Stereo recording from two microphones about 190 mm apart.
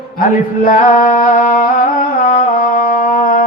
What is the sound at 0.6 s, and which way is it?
Music, 45° left (ahead or behind).